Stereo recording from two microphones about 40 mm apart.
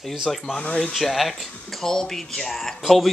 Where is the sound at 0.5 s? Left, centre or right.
Left.